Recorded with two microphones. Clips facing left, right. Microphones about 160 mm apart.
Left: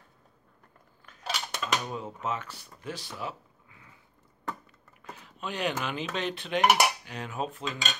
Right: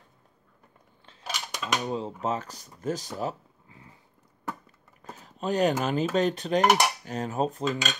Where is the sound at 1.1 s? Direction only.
30° right (ahead or behind).